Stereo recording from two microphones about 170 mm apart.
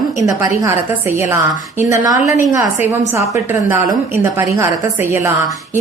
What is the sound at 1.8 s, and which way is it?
A woman's voice, 20° right (ahead or behind).